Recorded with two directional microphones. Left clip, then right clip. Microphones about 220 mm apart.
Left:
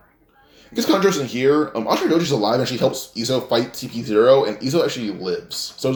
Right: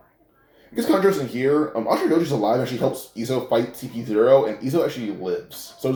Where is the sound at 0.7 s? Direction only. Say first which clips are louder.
Left 1 dB; 45° left (ahead or behind).